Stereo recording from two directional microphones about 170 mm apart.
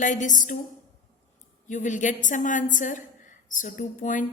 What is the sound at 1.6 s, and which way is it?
A woman's voice, 45° left (ahead or behind).